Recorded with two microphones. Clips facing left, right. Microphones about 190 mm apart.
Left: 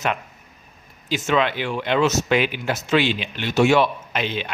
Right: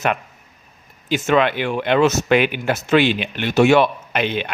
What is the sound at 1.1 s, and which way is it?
Speech, 55° right (ahead or behind).